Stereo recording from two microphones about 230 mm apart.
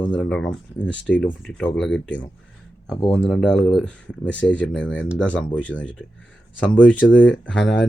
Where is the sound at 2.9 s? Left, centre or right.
Centre.